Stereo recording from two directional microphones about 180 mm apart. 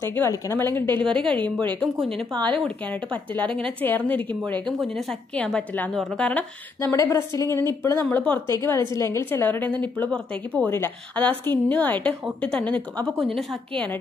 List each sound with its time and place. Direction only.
0.0 s a woman's voice: 15° left (ahead or behind)